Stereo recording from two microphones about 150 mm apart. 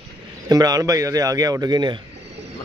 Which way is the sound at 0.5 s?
25° right (ahead or behind).